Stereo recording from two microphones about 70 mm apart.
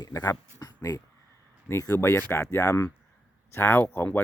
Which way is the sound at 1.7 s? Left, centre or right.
Left.